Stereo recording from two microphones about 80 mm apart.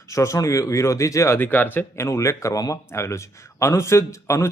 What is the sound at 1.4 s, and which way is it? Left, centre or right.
A man's voice, left.